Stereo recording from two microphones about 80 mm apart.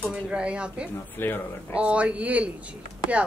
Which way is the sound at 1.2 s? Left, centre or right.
Left.